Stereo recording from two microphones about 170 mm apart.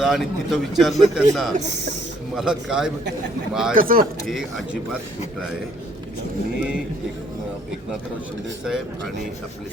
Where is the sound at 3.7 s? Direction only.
55° right (ahead or behind).